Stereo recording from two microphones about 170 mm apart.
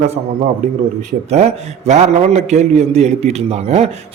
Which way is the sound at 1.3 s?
40° right (ahead or behind).